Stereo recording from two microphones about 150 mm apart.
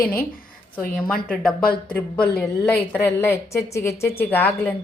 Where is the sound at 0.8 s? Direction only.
5° left (ahead or behind).